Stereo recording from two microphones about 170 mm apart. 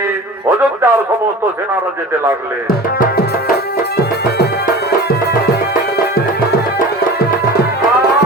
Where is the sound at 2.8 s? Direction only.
60° left (ahead or behind).